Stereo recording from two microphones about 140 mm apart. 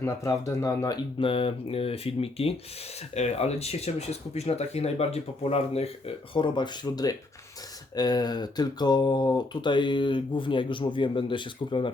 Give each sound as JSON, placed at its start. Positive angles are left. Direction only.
{"t": 0.0, "sound": "speech", "side_deg": 20}
{"t": 1.2, "sound": "speech", "side_deg": 40}
{"t": 6.3, "sound": "speech", "side_deg": 35}